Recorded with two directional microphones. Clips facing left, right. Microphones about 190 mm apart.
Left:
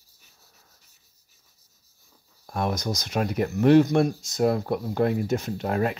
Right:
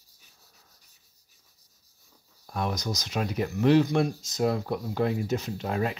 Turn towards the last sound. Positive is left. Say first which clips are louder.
# left 4 dB
turn(degrees=50)  # may be behind; listen again after turning